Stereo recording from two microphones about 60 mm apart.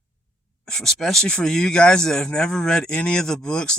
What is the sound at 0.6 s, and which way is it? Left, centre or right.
Speech, centre.